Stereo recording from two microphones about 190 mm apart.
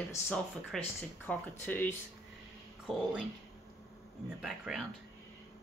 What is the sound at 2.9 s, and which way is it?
Speech, centre (ahead or behind).